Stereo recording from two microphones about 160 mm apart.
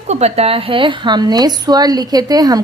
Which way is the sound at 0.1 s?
40° right (ahead or behind).